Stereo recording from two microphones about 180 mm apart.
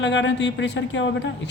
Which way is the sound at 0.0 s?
85° left.